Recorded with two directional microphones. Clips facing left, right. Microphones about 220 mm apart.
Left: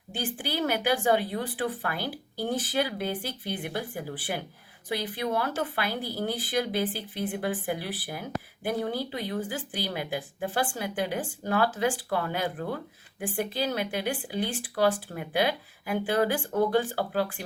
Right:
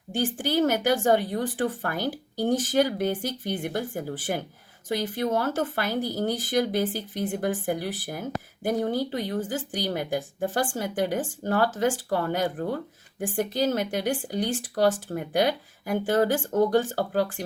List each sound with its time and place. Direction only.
0.3 s a woman's voice: 45° right (ahead or behind)